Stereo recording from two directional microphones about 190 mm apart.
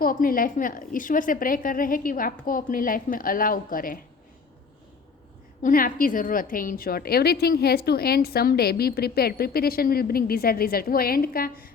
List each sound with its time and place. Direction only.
0.0 s a woman's voice: 50° left (ahead or behind)
5.6 s a woman's voice: 45° left (ahead or behind)